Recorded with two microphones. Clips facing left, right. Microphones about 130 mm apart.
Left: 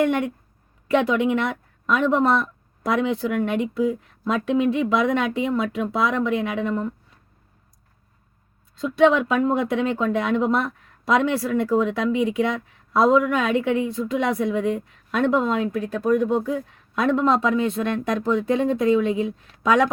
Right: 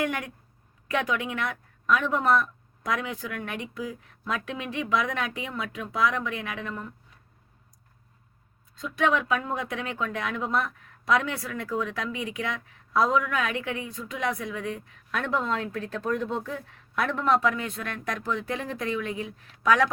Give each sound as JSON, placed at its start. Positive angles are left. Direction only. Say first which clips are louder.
{"t": 0.9, "sound": "speech", "louder": "left 9 dB", "side_deg": 25}
{"t": 8.7, "sound": "speech", "louder": "left 8 dB", "side_deg": 25}